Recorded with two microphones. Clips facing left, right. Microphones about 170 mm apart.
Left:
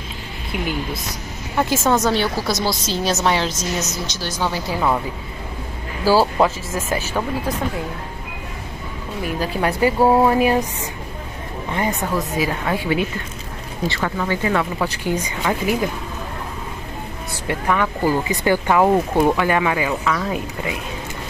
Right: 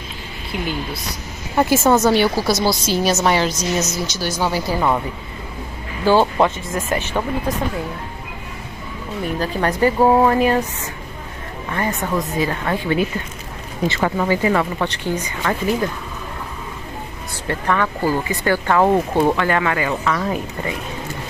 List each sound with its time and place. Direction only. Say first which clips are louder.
1.6 s a woman's voice: right 3 dB; 10° right (ahead or behind)
6.0 s a woman's voice: right 1 dB; 5° left (ahead or behind)
9.4 s speech: right 1 dB; 10° left (ahead or behind)
11.7 s speech: even; 15° left (ahead or behind)
12.2 s speech: right 1 dB; 5° left (ahead or behind)
13.8 s speech: right 4 dB; 20° right (ahead or behind); by 15.9 s 10° left (ahead or behind)
17.5 s speech: even; 15° left (ahead or behind)